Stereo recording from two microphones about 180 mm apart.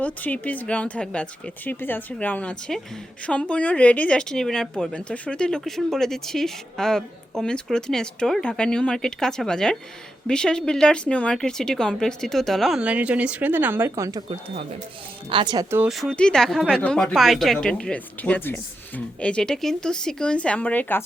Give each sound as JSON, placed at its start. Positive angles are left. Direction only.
{"t": 0.0, "sound": "speech", "side_deg": 10}
{"t": 15.3, "sound": "speech", "side_deg": -25}
{"t": 15.8, "sound": "speech", "side_deg": 0}